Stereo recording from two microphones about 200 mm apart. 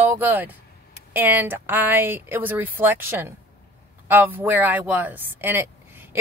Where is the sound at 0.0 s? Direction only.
10° right (ahead or behind).